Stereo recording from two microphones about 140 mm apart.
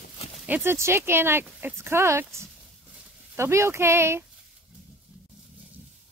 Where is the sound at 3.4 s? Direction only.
20° right (ahead or behind).